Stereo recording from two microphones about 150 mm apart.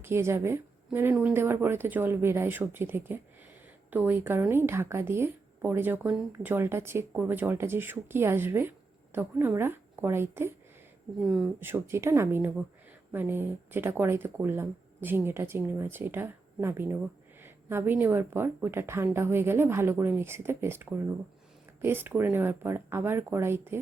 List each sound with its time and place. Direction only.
0.0 s a woman's voice: 15° right (ahead or behind)
11.2 s speech: centre (ahead or behind)
11.6 s a woman's voice: 15° right (ahead or behind)